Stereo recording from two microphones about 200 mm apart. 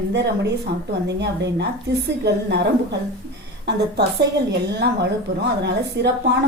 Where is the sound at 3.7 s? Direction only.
60° right (ahead or behind).